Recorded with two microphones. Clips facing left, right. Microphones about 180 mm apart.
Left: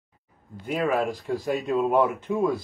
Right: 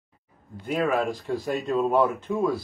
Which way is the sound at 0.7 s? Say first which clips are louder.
Even; 5° left (ahead or behind).